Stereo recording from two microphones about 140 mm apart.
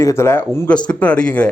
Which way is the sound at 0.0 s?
20° left (ahead or behind).